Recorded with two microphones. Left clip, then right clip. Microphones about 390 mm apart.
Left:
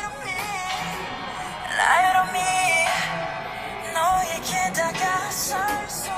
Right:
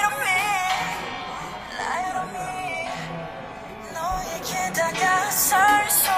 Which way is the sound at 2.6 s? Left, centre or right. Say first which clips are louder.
Left 11 dB; left.